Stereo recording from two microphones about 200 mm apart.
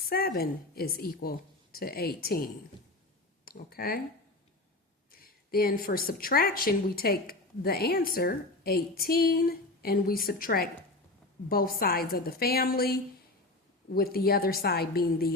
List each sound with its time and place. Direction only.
0.1 s a woman's voice: 50° left (ahead or behind)
5.1 s a woman's voice: 50° left (ahead or behind)